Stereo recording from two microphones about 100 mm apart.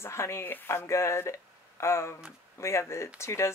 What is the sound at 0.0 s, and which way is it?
Speech, 25° left (ahead or behind).